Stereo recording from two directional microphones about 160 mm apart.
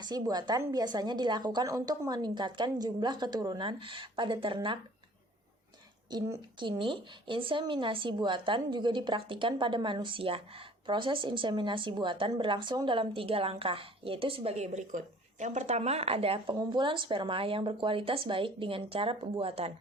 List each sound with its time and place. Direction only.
0.0 s a woman's voice: 25° right (ahead or behind)
6.6 s a woman's voice: 30° right (ahead or behind)